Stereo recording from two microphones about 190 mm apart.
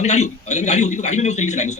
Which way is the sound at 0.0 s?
35° left (ahead or behind).